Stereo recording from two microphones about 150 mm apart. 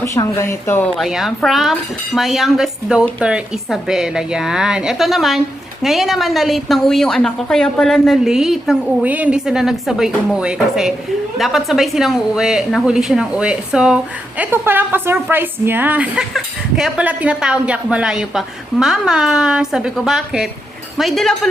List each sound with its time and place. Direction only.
0.0 s speech: 20° left (ahead or behind)
0.9 s a woman's voice: centre (ahead or behind)